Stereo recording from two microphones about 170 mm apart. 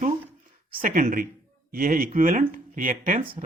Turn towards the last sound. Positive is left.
turn(degrees=-50)  # may be behind; listen again after turning